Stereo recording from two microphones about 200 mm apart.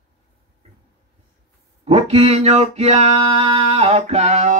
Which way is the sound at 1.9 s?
30° right (ahead or behind).